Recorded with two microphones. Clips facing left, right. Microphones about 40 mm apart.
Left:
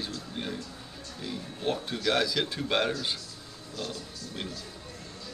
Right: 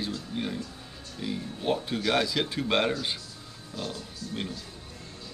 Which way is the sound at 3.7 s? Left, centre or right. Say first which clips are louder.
Right 1 dB; right.